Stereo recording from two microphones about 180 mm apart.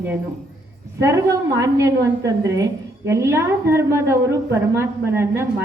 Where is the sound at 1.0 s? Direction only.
15° right (ahead or behind).